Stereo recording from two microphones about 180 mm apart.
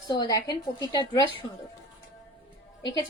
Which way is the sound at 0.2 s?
20° left (ahead or behind).